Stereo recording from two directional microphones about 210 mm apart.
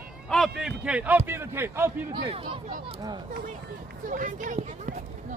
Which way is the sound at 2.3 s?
25° right (ahead or behind).